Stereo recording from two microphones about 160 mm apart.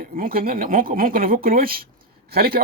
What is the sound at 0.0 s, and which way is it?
Speech, 65° right (ahead or behind).